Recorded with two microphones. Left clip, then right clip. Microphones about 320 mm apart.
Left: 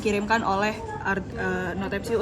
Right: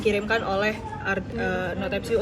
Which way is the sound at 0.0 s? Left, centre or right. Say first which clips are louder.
Even; left.